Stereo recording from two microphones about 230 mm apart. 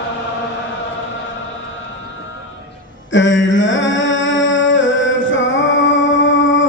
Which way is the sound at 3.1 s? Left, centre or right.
Left.